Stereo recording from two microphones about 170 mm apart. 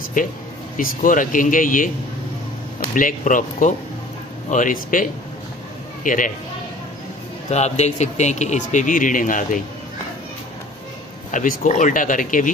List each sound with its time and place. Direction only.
0.2 s a man's voice: 55° left (ahead or behind)
2.9 s a man's voice: 50° left (ahead or behind)
7.5 s a man's voice: 40° left (ahead or behind)
11.3 s a man's voice: 50° left (ahead or behind)